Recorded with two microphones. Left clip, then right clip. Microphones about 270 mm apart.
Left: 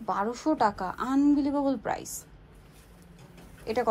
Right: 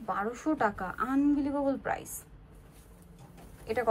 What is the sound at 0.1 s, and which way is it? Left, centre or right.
A woman's voice, centre.